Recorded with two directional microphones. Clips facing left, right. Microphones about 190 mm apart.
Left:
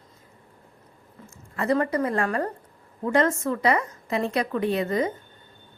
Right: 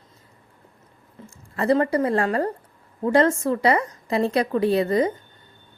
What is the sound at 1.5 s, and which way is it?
A woman's voice, 30° right (ahead or behind).